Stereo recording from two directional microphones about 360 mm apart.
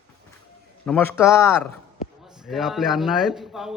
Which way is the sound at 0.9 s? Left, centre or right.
Centre.